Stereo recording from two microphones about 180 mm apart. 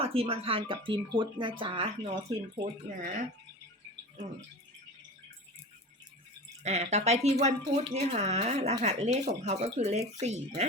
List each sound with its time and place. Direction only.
0.0 s speech: 30° right (ahead or behind)
2.8 s speech: 45° right (ahead or behind)
6.6 s speech: 40° right (ahead or behind)